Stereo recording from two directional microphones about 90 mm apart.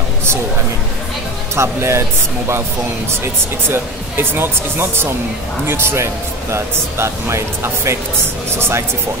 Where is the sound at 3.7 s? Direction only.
25° right (ahead or behind).